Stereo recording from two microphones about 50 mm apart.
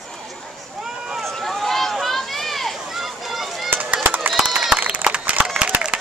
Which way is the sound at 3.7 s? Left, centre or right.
Right.